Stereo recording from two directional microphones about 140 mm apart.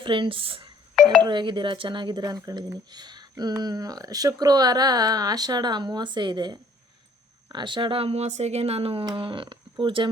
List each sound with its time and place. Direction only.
0.0 s speech: 35° right (ahead or behind)